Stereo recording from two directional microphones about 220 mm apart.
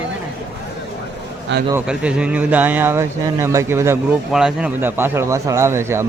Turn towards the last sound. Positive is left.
turn(degrees=-10)  # may be behind; listen again after turning